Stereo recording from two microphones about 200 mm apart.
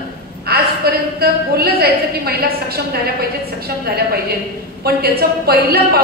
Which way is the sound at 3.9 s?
50° right (ahead or behind).